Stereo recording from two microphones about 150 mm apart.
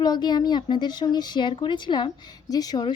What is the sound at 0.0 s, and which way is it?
A woman's voice, 30° left (ahead or behind).